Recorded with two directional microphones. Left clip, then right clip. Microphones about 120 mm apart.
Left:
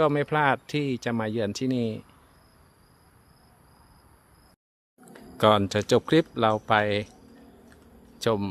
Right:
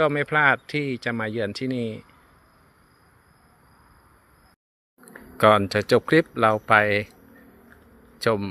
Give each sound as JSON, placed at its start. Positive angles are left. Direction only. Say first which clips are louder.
{"t": 0.0, "sound": "speech", "louder": "right 3 dB", "side_deg": 25}
{"t": 5.4, "sound": "speech", "louder": "right 4 dB", "side_deg": 5}